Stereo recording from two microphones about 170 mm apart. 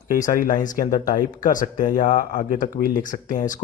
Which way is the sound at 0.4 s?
50° left (ahead or behind).